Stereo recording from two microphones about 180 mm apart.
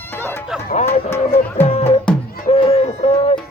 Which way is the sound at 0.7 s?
40° left (ahead or behind).